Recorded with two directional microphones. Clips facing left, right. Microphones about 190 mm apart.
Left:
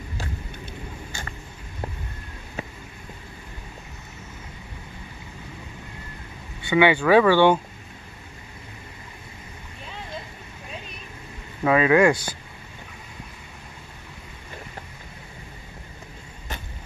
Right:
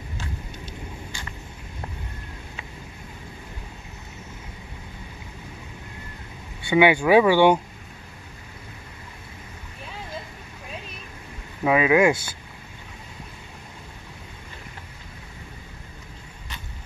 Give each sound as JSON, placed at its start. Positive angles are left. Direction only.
{"t": 0.7, "sound": "vehicle", "side_deg": 50}
{"t": 6.6, "sound": "speech", "side_deg": -10}
{"t": 11.6, "sound": "speech", "side_deg": -10}